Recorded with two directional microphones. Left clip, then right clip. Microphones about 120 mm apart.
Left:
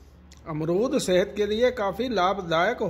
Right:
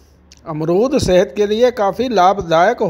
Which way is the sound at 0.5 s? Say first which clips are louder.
Right 10 dB; 40° right (ahead or behind).